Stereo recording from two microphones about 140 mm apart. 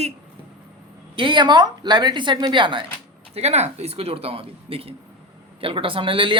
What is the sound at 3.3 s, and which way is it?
Speech, 50° right (ahead or behind).